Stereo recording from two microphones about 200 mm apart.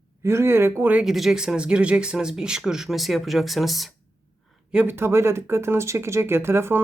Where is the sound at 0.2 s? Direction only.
15° right (ahead or behind).